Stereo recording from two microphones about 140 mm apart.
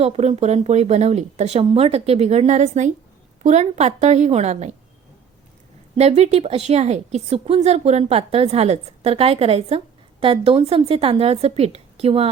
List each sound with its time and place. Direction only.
0.0 s a woman's voice: 45° right (ahead or behind)
6.0 s a woman's voice: 50° right (ahead or behind)